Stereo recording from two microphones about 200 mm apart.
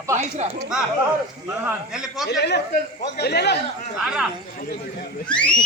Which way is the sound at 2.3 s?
60° left (ahead or behind).